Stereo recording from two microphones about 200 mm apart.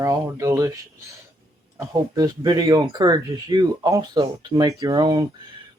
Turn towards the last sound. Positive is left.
turn(degrees=-15)  # may be behind; listen again after turning